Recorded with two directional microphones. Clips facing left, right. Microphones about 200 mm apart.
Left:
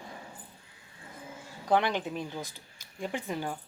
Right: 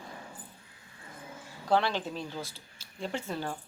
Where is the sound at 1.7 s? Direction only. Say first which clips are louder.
Left 1 dB; 15° left (ahead or behind).